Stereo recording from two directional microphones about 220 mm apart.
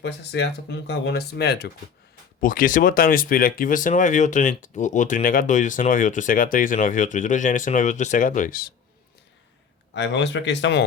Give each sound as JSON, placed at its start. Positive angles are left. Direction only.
{"t": 0.0, "sound": "speech", "side_deg": 50}
{"t": 9.9, "sound": "speech", "side_deg": 55}